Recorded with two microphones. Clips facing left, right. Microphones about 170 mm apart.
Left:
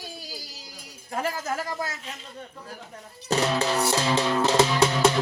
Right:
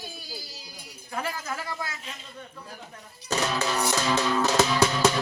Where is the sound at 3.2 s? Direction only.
30° left (ahead or behind).